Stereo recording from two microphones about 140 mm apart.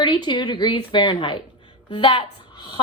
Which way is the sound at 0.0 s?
35° left (ahead or behind).